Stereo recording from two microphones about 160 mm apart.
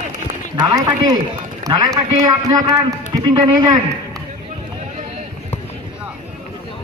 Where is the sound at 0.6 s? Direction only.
25° right (ahead or behind).